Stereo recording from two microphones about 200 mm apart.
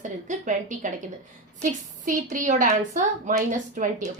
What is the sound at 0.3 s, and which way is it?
A woman's voice, 40° right (ahead or behind).